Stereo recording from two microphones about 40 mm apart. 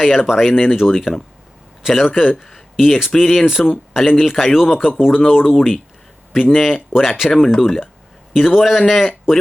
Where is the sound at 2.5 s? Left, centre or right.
Centre.